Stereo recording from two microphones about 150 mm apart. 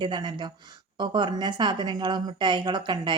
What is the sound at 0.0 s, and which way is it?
A woman's voice, 30° right (ahead or behind).